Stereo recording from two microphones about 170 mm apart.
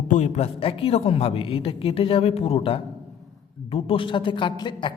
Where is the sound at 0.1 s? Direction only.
40° left (ahead or behind).